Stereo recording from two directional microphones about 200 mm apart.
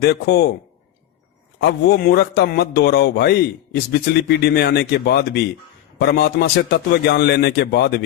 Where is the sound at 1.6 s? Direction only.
50° left (ahead or behind).